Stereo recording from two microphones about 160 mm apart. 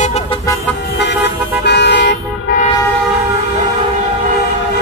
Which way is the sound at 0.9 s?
90° left.